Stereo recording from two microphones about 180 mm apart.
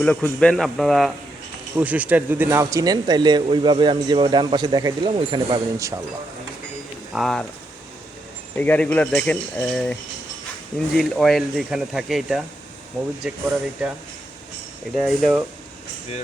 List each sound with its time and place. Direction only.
0.0 s speech: 5° left (ahead or behind); by 6.0 s 20° right (ahead or behind)
7.1 s speech: centre (ahead or behind)
8.5 s speech: 10° left (ahead or behind)
14.9 s speech: centre (ahead or behind)